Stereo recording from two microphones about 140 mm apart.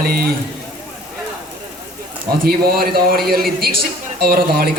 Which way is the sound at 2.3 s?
90° right.